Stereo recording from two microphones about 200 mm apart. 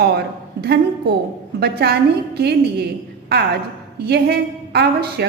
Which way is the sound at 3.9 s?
55° right (ahead or behind).